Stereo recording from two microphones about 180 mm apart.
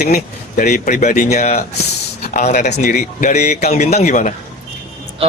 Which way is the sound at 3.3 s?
40° left (ahead or behind).